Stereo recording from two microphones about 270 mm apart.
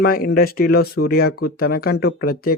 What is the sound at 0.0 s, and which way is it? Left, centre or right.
Speech, left.